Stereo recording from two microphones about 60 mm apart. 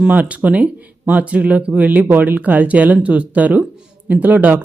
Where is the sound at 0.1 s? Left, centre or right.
Right.